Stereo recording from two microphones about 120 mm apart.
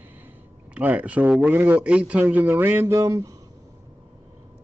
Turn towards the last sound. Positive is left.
turn(degrees=-25)  # may be behind; listen again after turning